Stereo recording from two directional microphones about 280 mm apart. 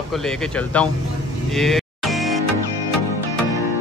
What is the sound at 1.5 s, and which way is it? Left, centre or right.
Music, centre.